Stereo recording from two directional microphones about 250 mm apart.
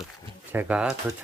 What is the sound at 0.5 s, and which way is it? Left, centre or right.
Speech, centre.